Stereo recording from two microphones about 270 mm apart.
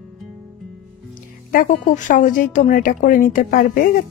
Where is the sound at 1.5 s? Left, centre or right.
Left.